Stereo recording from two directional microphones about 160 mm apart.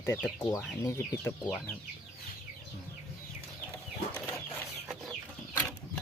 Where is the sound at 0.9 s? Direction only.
15° left (ahead or behind).